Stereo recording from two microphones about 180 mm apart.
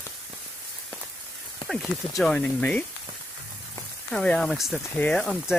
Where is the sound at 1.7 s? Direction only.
Centre (ahead or behind).